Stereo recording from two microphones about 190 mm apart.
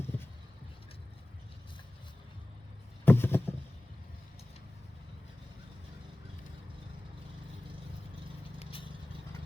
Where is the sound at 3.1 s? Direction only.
10° left (ahead or behind).